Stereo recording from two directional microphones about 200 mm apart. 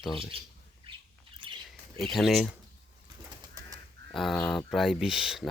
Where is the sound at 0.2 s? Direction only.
25° right (ahead or behind).